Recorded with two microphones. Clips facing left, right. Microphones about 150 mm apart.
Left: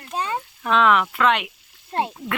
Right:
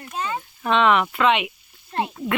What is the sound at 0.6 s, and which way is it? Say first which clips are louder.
Speech: even; centre (ahead or behind).